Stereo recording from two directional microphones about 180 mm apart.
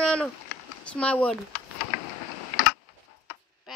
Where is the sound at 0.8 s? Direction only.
5° left (ahead or behind).